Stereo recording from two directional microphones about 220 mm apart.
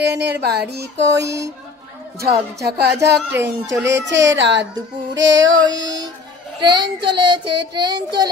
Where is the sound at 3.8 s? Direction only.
55° right (ahead or behind).